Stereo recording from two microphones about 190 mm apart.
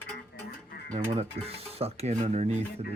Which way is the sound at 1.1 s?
30° right (ahead or behind).